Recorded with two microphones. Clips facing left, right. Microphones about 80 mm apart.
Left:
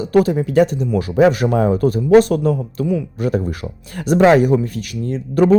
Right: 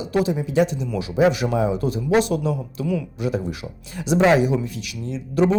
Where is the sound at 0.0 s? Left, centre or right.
Left.